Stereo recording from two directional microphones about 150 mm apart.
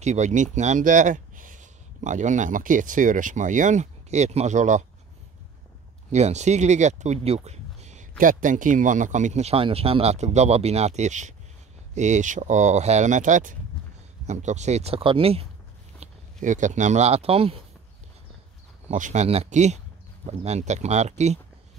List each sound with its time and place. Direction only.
0.0 s speech: 50° right (ahead or behind)
6.1 s speech: 50° right (ahead or behind)
8.2 s speech: 60° right (ahead or behind); by 15.4 s 40° right (ahead or behind)
16.0 s speech: 55° right (ahead or behind)
18.9 s speech: 55° right (ahead or behind)